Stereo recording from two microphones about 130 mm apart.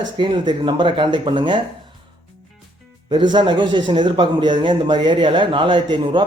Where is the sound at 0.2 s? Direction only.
40° right (ahead or behind).